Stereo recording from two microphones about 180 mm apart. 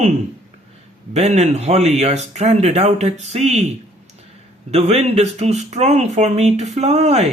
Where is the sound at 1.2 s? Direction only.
40° right (ahead or behind).